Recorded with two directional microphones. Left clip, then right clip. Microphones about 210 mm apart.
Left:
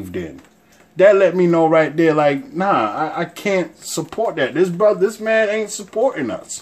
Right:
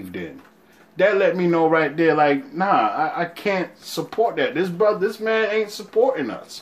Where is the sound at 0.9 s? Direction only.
55° left (ahead or behind).